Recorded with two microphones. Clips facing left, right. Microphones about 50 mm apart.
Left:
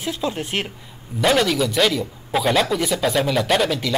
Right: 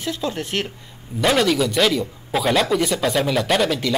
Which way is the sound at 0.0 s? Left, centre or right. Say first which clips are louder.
Even; centre.